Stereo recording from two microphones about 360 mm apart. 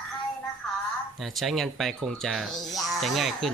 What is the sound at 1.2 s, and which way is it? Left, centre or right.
Speech, centre.